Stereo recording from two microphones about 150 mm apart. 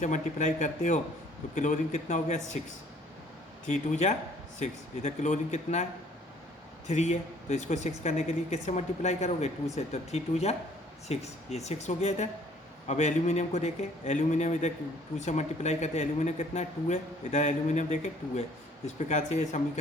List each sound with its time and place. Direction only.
0.0 s speech: 55° left (ahead or behind)
3.7 s speech: 50° left (ahead or behind)
6.8 s speech: 50° left (ahead or behind)